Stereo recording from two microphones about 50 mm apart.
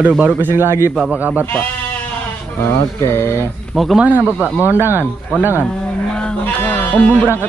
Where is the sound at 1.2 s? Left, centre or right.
Right.